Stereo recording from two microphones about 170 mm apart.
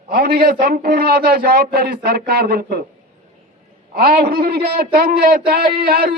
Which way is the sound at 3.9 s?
65° right (ahead or behind).